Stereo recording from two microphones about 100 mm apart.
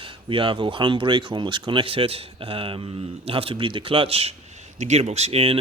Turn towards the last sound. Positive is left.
turn(degrees=-80)